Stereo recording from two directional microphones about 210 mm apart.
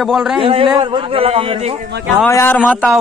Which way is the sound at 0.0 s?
Centre (ahead or behind).